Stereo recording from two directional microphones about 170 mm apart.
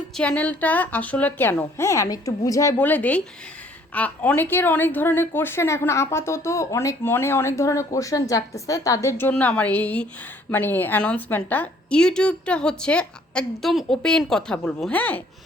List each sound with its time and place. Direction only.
0.2 s a woman's voice: 5° left (ahead or behind)